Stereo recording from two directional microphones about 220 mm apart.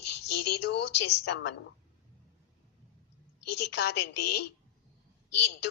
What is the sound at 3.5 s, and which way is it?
Speech, 50° left (ahead or behind).